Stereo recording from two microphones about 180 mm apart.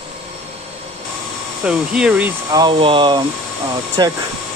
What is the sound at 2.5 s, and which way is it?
Speech, 25° right (ahead or behind).